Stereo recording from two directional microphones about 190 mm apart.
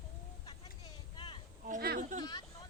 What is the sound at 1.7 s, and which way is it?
Speech, 50° right (ahead or behind).